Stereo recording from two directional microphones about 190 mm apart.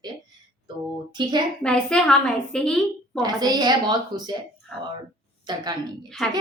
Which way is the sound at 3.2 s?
20° right (ahead or behind).